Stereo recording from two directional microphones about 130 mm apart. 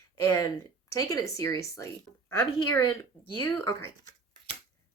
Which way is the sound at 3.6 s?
30° left (ahead or behind).